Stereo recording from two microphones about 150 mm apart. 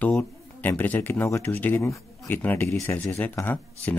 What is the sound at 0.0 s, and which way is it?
Speech, 10° left (ahead or behind).